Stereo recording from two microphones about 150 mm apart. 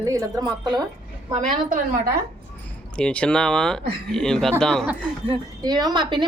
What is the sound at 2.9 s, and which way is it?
Speech, 5° left (ahead or behind).